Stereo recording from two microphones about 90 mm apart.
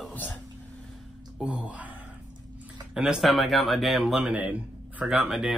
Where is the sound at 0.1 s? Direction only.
20° left (ahead or behind).